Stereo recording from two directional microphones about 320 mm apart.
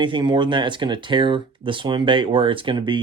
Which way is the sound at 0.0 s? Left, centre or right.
Centre.